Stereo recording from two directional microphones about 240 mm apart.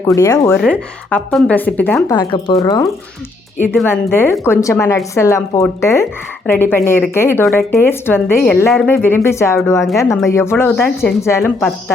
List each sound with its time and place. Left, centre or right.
0.2 s speech: centre
0.5 s speech: centre